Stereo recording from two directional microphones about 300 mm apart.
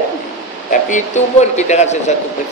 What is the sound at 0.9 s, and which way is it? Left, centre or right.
Speech, left.